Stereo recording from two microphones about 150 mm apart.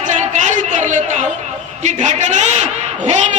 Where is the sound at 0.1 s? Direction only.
55° right (ahead or behind).